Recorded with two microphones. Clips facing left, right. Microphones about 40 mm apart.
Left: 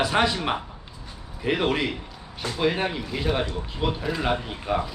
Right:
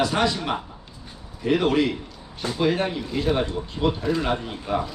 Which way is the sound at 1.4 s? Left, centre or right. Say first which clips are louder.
Right 3 dB; centre.